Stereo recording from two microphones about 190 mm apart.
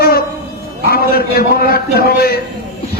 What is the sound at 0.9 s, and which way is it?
A man's voice, 55° left (ahead or behind).